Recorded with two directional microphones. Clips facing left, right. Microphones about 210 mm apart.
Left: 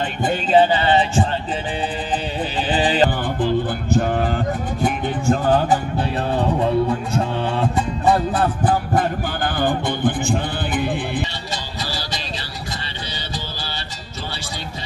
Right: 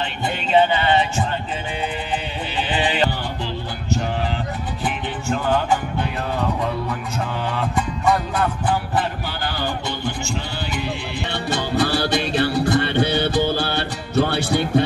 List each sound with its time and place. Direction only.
0.2 s music: 40° left (ahead or behind)
2.7 s music: 35° left (ahead or behind)
3.3 s music: 50° left (ahead or behind)
4.8 s music: 35° left (ahead or behind)
8.9 s music: 50° left (ahead or behind)
11.5 s music: 60° right (ahead or behind)